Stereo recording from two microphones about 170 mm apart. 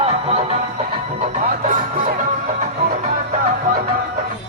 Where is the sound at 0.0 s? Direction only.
35° right (ahead or behind); by 3.9 s 55° right (ahead or behind).